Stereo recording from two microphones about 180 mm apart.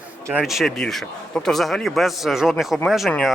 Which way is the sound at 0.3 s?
5° right (ahead or behind).